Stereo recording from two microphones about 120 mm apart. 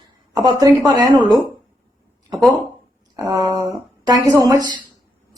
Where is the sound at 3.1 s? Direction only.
35° right (ahead or behind).